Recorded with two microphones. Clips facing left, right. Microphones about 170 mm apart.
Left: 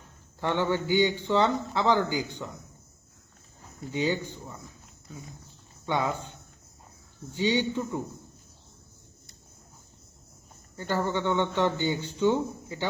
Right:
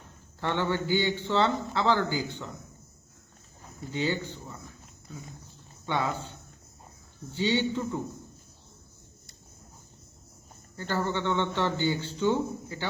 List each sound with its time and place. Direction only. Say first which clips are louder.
0.3 s a man's voice: left 2 dB; 15° left (ahead or behind)
3.9 s a man's voice: left 2 dB; 15° left (ahead or behind)
5.8 s a man's voice: left 1 dB; 20° left (ahead or behind)
7.3 s a man's voice: left 1 dB; 15° left (ahead or behind)
10.8 s a man's voice: left 2 dB; 15° left (ahead or behind)